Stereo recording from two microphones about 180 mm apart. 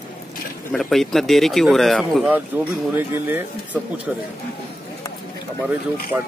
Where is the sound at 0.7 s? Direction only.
Centre (ahead or behind).